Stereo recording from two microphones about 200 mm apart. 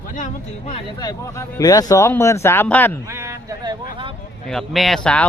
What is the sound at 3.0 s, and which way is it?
Speech, 15° right (ahead or behind).